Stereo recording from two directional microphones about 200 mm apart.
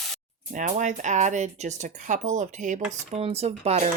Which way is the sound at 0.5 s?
40° right (ahead or behind).